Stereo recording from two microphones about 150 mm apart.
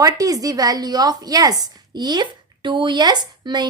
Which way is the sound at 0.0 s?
25° right (ahead or behind).